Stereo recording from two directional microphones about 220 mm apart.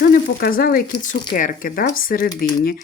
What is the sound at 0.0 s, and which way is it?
Speech, 45° left (ahead or behind).